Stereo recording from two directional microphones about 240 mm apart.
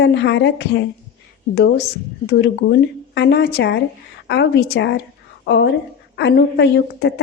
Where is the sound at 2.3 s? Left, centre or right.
Left.